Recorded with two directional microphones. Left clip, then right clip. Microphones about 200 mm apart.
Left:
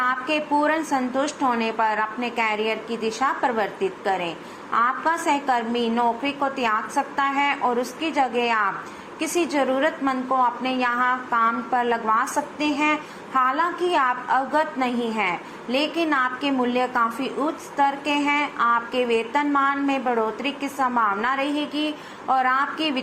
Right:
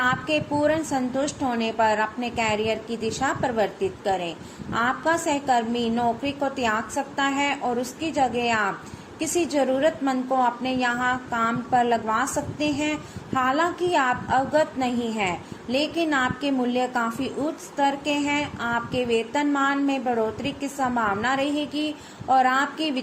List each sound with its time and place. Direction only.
0.1 s a woman's voice: 20° right (ahead or behind)